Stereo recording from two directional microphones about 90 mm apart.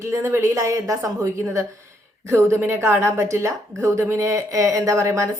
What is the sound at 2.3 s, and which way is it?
A woman's voice, 30° right (ahead or behind).